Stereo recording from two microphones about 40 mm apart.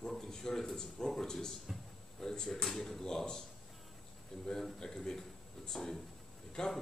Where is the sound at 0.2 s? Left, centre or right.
Centre.